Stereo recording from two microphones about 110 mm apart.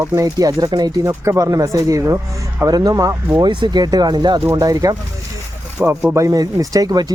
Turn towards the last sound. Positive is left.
turn(degrees=-35)  # may be behind; listen again after turning